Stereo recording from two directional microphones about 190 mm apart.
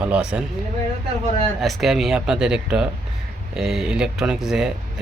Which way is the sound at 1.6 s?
Centre (ahead or behind).